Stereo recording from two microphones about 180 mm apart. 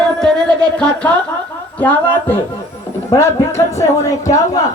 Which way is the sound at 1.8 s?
10° left (ahead or behind).